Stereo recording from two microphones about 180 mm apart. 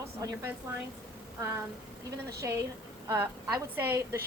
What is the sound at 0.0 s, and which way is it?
Speech, 15° right (ahead or behind).